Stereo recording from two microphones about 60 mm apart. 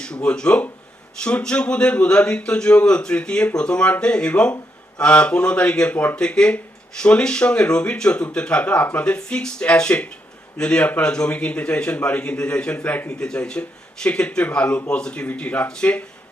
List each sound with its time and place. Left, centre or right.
0.0 s a man's voice: centre